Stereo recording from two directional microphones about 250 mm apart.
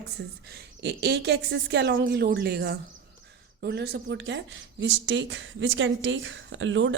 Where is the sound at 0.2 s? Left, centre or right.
Right.